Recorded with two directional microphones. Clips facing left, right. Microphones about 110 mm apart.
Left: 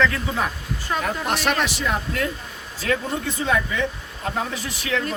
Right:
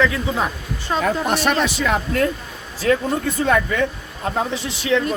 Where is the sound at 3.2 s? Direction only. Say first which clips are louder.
Right 5 dB; 55° right (ahead or behind).